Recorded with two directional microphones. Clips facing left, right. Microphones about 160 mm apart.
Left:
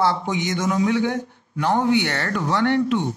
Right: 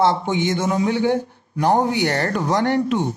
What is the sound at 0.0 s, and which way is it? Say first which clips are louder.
A man's voice: right 3 dB; 25° right (ahead or behind).